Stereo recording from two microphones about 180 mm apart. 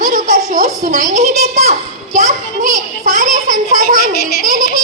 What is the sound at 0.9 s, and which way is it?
Speech, 40° right (ahead or behind).